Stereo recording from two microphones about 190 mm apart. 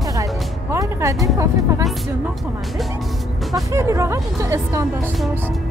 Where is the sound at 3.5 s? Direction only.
15° right (ahead or behind).